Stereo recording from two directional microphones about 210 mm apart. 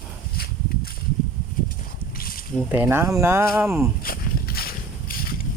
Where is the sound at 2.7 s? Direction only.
10° right (ahead or behind).